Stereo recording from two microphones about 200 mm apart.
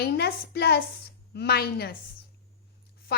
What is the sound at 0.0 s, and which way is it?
A woman's voice, 55° left (ahead or behind).